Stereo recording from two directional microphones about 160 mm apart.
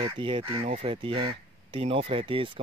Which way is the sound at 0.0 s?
35° right (ahead or behind).